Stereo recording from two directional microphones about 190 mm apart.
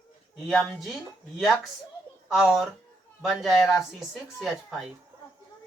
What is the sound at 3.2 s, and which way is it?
Speech, centre (ahead or behind).